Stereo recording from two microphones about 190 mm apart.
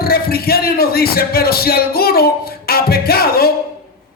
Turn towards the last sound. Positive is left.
turn(degrees=55)  # may be behind; listen again after turning